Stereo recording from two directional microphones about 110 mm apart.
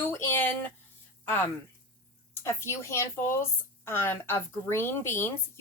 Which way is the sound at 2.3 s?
20° left (ahead or behind).